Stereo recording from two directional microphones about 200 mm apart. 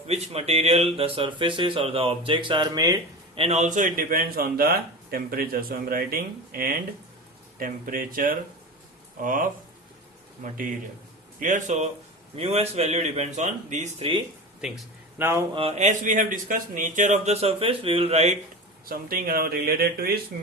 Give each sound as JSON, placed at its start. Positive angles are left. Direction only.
{"t": 0.1, "sound": "speech", "side_deg": -30}
{"t": 11.3, "sound": "speech", "side_deg": -40}
{"t": 15.2, "sound": "speech", "side_deg": -10}
{"t": 15.5, "sound": "speech", "side_deg": -30}
{"t": 18.9, "sound": "speech", "side_deg": -45}